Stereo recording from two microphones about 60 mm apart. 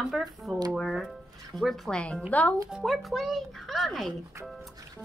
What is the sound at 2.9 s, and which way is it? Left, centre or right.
Speech, centre.